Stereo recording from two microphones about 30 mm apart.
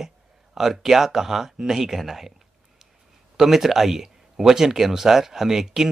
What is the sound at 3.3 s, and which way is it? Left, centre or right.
Speech, centre.